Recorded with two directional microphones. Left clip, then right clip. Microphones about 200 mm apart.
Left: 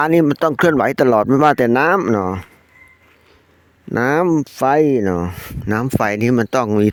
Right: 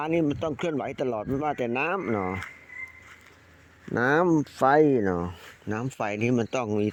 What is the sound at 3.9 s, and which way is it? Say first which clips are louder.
Speech: left 7 dB; 55° left (ahead or behind).